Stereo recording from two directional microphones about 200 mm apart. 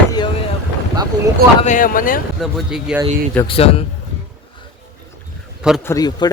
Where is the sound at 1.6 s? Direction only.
40° left (ahead or behind).